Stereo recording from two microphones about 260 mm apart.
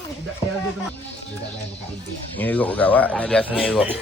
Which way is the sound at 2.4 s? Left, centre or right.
Centre.